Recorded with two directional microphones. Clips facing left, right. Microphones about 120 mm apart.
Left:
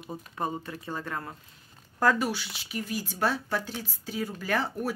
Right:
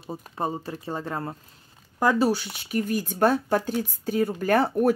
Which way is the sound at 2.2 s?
45° right (ahead or behind).